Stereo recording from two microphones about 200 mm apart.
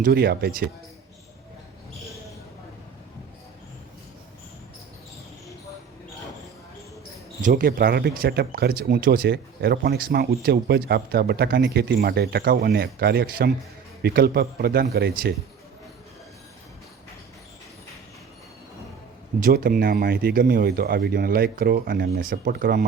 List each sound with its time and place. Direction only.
0.0 s speech: 55° right (ahead or behind)
7.4 s speech: 45° right (ahead or behind)
19.4 s speech: 50° right (ahead or behind)